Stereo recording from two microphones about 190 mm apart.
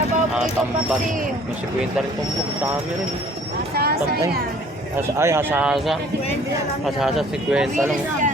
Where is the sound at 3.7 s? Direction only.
55° right (ahead or behind).